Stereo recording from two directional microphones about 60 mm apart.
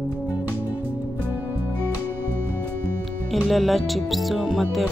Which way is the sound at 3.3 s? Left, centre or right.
Centre.